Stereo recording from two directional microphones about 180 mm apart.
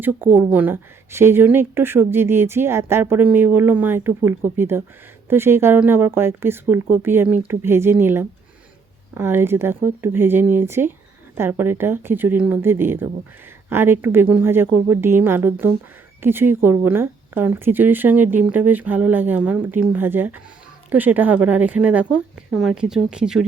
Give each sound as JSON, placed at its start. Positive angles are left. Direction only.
{"t": 0.0, "sound": "speech", "side_deg": -10}